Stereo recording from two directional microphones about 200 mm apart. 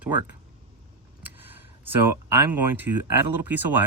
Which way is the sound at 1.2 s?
10° right (ahead or behind).